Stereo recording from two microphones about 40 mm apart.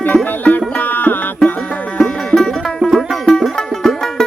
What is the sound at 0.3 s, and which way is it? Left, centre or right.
Music, left.